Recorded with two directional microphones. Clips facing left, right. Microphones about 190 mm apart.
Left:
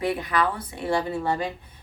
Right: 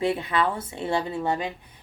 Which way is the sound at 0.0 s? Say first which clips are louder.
Even; 25° right (ahead or behind).